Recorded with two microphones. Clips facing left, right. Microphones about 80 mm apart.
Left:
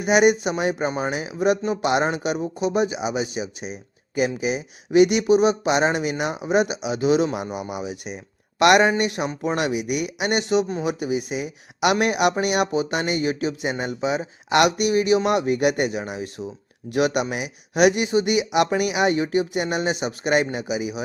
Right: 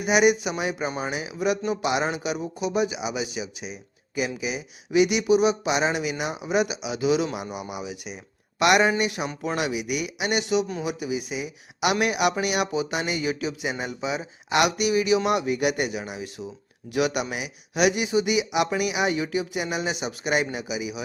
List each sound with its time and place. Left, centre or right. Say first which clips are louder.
0.0 s speech: left 3 dB; left
0.9 s speech: left 4 dB; left
1.2 s speech: left 4 dB; left
8.5 s speech: left 4 dB; left
10.8 s speech: left 4 dB; left